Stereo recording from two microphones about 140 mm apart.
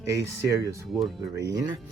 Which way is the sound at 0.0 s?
20° right (ahead or behind).